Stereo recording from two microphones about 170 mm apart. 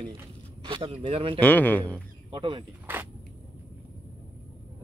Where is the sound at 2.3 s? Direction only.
30° right (ahead or behind).